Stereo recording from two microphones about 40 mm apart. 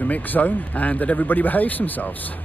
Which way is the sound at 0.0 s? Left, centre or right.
Left.